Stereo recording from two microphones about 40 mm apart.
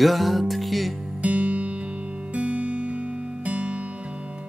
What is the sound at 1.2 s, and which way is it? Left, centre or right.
Music, right.